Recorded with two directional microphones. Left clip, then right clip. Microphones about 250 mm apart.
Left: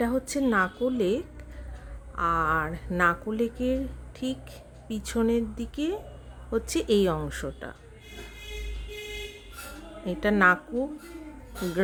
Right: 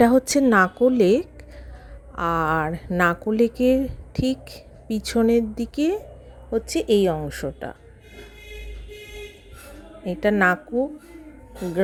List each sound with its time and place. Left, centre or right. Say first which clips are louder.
0.0 s speech: right 10 dB; right
6.5 s speech: right 5 dB; centre
10.0 s speech: right 3 dB; centre